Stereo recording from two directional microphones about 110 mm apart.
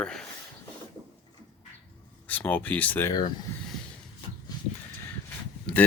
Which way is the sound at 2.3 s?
15° left (ahead or behind).